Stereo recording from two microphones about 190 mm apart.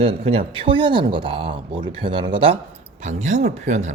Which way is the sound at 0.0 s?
30° right (ahead or behind).